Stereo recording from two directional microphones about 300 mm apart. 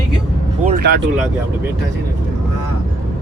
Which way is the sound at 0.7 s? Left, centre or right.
Right.